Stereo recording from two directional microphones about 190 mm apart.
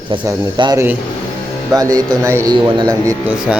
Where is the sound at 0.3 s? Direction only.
20° right (ahead or behind).